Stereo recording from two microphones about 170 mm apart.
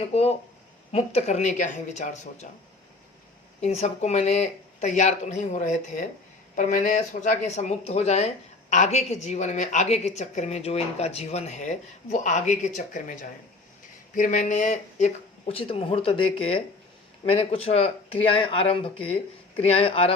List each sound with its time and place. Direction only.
0.1 s a woman's voice: 35° left (ahead or behind)
3.6 s a woman's voice: 40° left (ahead or behind)